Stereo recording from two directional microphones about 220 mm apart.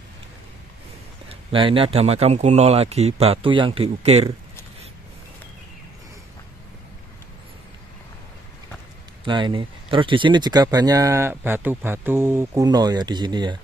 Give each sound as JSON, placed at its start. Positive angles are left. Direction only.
{"t": 1.3, "sound": "speech", "side_deg": -25}
{"t": 9.2, "sound": "speech", "side_deg": -20}